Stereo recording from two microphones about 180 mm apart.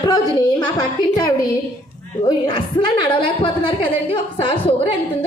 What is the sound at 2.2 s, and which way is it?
A woman's voice, 25° left (ahead or behind).